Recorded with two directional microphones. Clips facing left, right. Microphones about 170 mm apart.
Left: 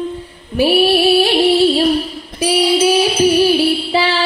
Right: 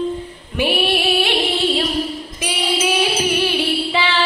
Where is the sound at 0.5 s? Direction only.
35° left (ahead or behind).